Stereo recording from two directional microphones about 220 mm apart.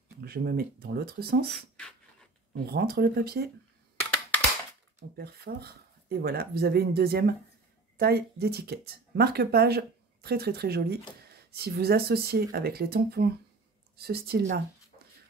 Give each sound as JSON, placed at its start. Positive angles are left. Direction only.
{"t": 0.2, "sound": "speech", "side_deg": -45}
{"t": 2.5, "sound": "speech", "side_deg": -45}
{"t": 5.1, "sound": "speech", "side_deg": -45}